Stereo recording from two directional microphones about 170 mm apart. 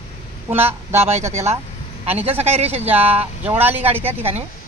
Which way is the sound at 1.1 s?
40° right (ahead or behind).